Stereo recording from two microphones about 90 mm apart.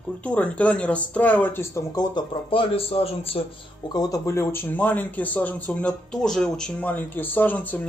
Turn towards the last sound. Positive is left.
turn(degrees=20)  # may be behind; listen again after turning